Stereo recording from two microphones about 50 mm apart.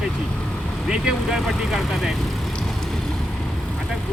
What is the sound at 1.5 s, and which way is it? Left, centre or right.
Speech, centre.